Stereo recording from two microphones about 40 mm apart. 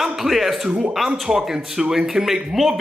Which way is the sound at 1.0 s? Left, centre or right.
Centre.